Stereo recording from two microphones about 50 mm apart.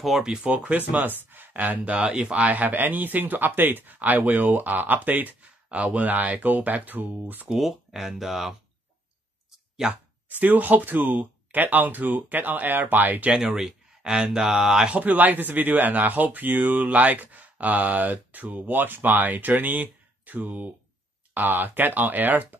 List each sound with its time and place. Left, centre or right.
0.2 s speech: centre
0.5 s speech: right
1.0 s speech: right
7.5 s speech: centre
10.4 s speech: right
13.3 s speech: centre
14.9 s speech: right